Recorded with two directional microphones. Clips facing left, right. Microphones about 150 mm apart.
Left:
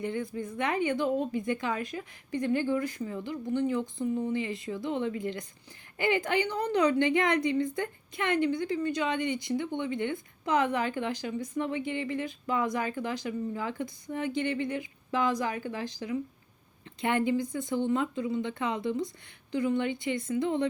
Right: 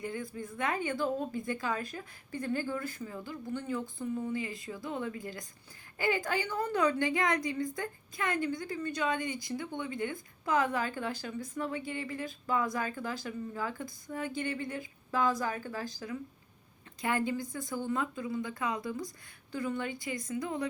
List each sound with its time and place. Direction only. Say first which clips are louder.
0.0 s a woman's voice: left 5 dB; 20° left (ahead or behind)